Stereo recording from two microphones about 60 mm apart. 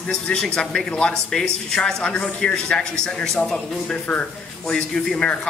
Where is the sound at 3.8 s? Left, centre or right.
Left.